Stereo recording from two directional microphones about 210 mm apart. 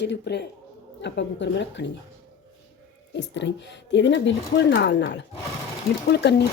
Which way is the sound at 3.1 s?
55° left (ahead or behind).